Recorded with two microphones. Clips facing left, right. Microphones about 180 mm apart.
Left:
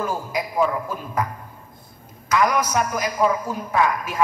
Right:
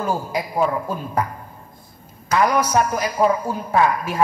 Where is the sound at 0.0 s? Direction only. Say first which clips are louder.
Right 2 dB; 30° right (ahead or behind).